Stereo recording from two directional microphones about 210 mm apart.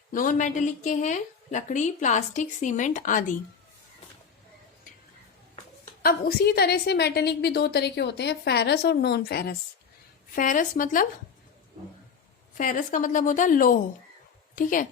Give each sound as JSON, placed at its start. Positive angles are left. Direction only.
{"t": 0.1, "sound": "a woman's voice", "side_deg": 40}
{"t": 6.0, "sound": "a woman's voice", "side_deg": 45}
{"t": 12.5, "sound": "a woman's voice", "side_deg": 40}